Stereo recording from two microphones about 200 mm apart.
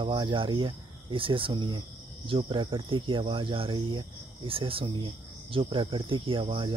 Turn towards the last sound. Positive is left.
turn(degrees=-25)  # may be behind; listen again after turning